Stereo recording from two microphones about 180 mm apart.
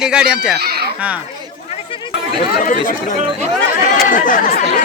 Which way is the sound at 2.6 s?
45° left (ahead or behind).